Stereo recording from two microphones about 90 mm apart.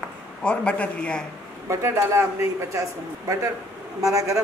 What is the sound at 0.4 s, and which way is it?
Speech, 15° left (ahead or behind).